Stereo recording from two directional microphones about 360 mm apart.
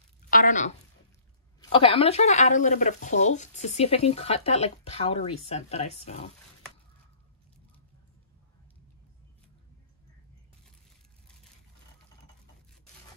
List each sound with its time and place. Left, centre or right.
0.3 s a woman's voice: left